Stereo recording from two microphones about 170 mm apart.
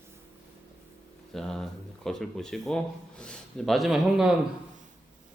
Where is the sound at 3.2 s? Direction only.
5° left (ahead or behind).